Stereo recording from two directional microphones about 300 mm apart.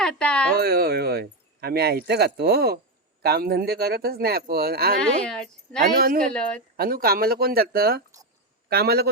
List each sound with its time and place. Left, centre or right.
0.0 s speech: centre
0.5 s speech: right
4.9 s speech: centre
6.0 s a woman's voice: right